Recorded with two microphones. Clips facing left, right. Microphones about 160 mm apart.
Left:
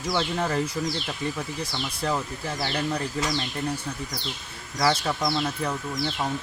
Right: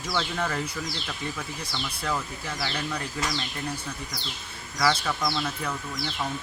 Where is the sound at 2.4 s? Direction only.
35° left (ahead or behind).